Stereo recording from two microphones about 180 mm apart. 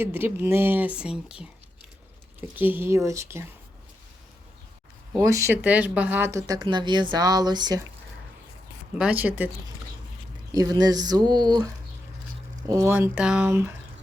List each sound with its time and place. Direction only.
0.0 s speech: 10° right (ahead or behind)
2.6 s speech: 10° right (ahead or behind)
5.1 s speech: 15° right (ahead or behind)
9.0 s speech: 5° right (ahead or behind)
10.5 s speech: 20° right (ahead or behind)